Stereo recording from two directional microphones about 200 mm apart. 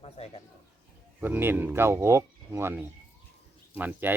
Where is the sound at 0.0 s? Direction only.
30° left (ahead or behind).